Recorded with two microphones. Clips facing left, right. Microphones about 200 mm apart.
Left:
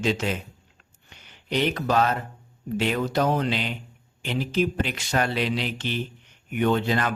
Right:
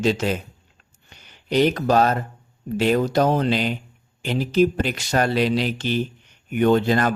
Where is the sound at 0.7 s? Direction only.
40° right (ahead or behind).